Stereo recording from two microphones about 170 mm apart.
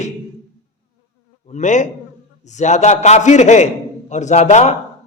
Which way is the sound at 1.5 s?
45° left (ahead or behind).